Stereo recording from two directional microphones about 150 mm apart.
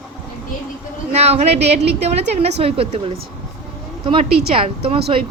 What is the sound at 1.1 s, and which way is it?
A woman's voice, 45° right (ahead or behind).